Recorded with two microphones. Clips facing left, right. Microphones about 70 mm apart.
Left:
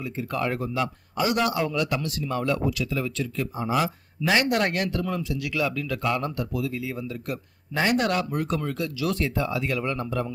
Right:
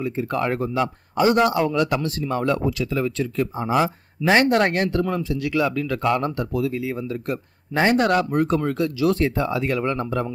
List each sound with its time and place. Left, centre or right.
0.0 s speech: right